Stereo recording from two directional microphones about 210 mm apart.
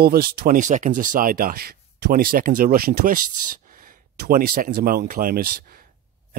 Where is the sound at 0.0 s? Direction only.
45° right (ahead or behind).